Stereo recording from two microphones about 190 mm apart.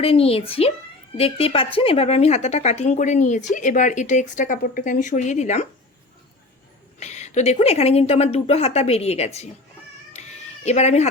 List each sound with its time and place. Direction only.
0.0 s speech: 30° left (ahead or behind)
7.0 s speech: 35° left (ahead or behind)
10.1 s cat: 35° left (ahead or behind)